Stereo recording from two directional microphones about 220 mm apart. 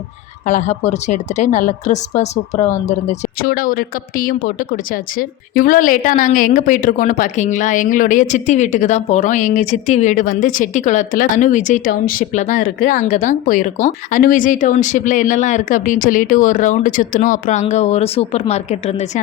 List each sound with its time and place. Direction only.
0.4 s a woman's voice: 35° left (ahead or behind)
5.5 s a woman's voice: 40° left (ahead or behind)